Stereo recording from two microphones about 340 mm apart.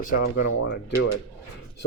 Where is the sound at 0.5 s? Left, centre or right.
Left.